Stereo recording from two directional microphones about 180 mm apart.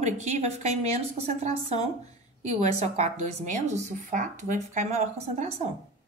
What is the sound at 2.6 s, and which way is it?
Speech, 40° right (ahead or behind).